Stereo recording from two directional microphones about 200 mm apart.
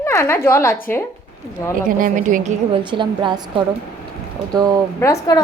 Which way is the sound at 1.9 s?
45° right (ahead or behind).